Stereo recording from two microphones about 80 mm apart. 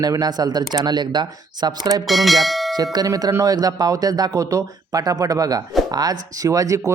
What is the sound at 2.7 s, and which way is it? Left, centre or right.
Speech, right.